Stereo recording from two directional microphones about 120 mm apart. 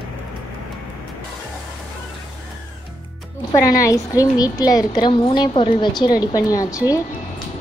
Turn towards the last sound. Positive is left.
turn(degrees=30)  # may be behind; listen again after turning